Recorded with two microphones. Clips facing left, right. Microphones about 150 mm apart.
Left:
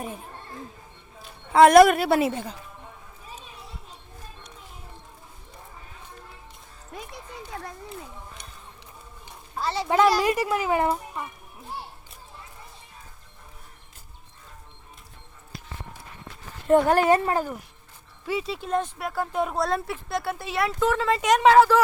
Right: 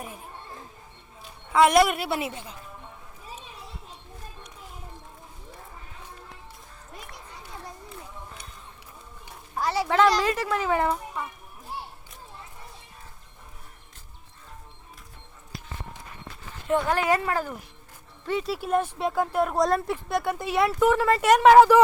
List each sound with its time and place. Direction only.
1.5 s a woman's voice: 45° left (ahead or behind)
7.5 s children playing: 80° left
9.6 s a sound: 15° right (ahead or behind)
9.9 s a child's voice: 10° left (ahead or behind)
16.6 s a woman's voice: 45° left (ahead or behind)
17.1 s speech: 30° left (ahead or behind)
18.3 s speech: centre (ahead or behind)
18.9 s speech: 25° right (ahead or behind)
19.2 s speech: 5° right (ahead or behind)